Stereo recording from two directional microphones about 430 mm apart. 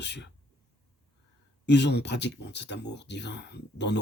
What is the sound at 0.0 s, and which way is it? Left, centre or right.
Speech, left.